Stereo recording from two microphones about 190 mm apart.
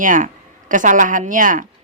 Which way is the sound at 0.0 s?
45° right (ahead or behind).